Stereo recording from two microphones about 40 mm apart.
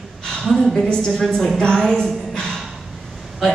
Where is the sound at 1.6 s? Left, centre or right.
Centre.